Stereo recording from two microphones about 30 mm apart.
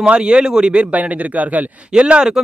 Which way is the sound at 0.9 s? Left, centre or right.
Right.